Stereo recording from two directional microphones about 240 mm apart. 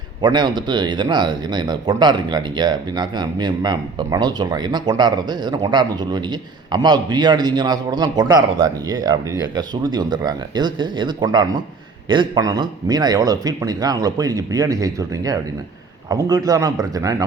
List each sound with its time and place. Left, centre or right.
0.2 s speech: centre